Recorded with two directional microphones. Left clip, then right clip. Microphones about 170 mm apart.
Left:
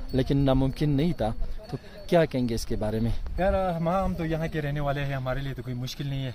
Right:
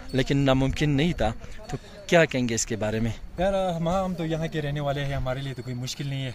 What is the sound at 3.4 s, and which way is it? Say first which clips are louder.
A man's voice: right 1 dB; 10° right (ahead or behind).